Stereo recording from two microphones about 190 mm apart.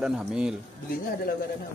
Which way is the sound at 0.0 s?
5° right (ahead or behind).